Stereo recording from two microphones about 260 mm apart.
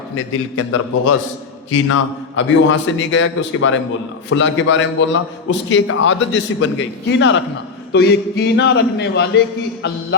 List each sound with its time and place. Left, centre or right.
0.2 s a man's voice: left